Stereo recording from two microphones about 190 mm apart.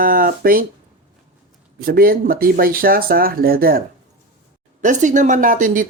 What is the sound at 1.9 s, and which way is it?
Speech, 50° right (ahead or behind).